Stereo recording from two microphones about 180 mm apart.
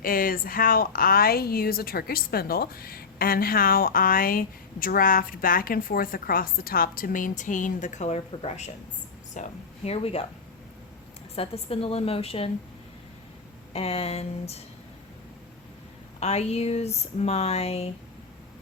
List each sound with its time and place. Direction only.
0.0 s a woman's voice: 50° left (ahead or behind); by 10.2 s 35° left (ahead or behind)
11.3 s speech: 30° left (ahead or behind)
13.7 s speech: 35° left (ahead or behind)
16.2 s speech: 35° left (ahead or behind)